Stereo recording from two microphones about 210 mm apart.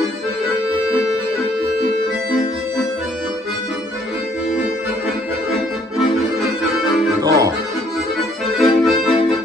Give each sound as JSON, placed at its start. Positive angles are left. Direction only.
{"t": 7.2, "sound": "accordion", "side_deg": -15}
{"t": 8.5, "sound": "accordion", "side_deg": 0}